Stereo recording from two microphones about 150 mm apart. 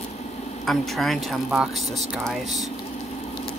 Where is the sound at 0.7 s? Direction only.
Centre (ahead or behind).